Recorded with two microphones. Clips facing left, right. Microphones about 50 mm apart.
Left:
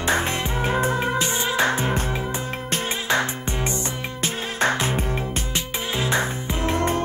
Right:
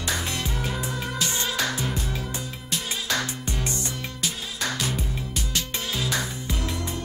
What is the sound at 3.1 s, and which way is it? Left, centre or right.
Music, left.